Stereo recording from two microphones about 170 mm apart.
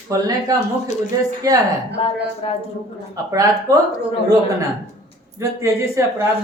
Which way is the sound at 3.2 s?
20° right (ahead or behind).